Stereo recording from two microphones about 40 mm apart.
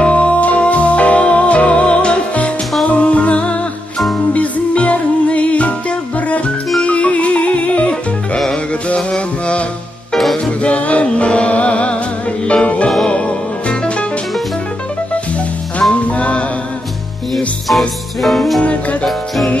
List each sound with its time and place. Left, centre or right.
0.0 s music: left
15.9 s music: left
17.6 s music: centre
18.6 s music: left